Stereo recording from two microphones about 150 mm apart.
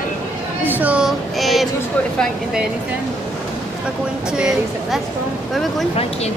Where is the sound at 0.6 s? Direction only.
10° right (ahead or behind).